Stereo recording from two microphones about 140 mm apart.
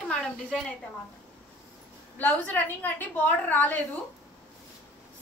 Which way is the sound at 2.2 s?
15° left (ahead or behind).